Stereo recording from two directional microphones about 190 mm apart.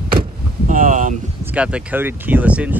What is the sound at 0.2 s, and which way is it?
Vehicle, 45° right (ahead or behind).